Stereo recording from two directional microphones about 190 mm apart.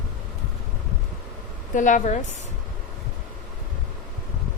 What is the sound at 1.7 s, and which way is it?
Speech, 40° left (ahead or behind).